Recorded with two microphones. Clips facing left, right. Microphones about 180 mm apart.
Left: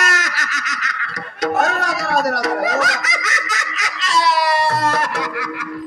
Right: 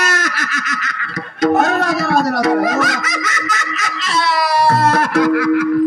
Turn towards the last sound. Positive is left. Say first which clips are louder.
# right 13 dB
turn(degrees=-60)  # may be behind; listen again after turning